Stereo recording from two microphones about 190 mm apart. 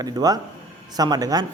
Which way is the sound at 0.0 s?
20° right (ahead or behind).